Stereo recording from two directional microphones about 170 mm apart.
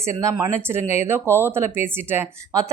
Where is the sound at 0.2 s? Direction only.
20° right (ahead or behind).